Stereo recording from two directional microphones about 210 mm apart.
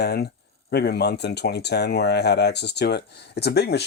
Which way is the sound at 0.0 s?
50° left (ahead or behind).